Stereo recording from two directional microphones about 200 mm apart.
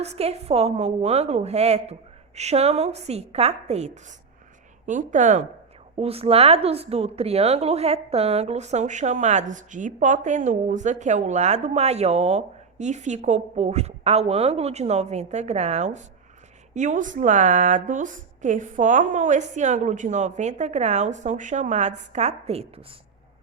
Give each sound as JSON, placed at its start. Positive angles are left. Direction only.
{"t": 0.0, "sound": "a woman's voice", "side_deg": -30}